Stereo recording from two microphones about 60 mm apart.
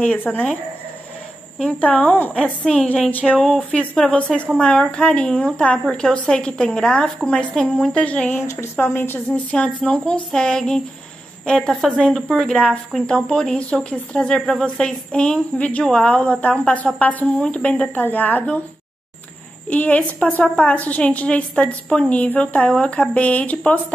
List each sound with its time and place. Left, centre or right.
0.0 s a woman's voice: left
1.7 s a woman's voice: left
2.3 s speech: centre
3.1 s a woman's voice: left; by 7.9 s centre
7.9 s a woman's voice: left
8.7 s a woman's voice: left
9.3 s a woman's voice: left
19.7 s a woman's voice: left